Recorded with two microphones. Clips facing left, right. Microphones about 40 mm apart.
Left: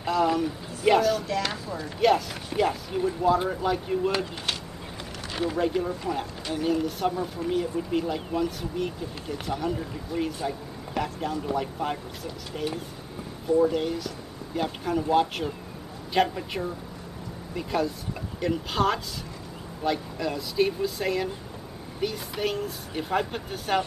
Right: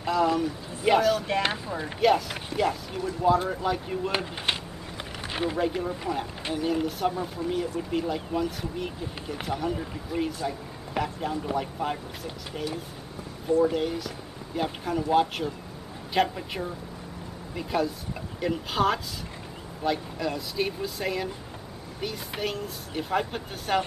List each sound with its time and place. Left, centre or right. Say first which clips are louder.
0.0 s speech: even; centre
1.2 s speech: right 2 dB; right
2.0 s speech: left 1 dB; centre
5.3 s speech: even; right
5.6 s speech: left 2 dB; centre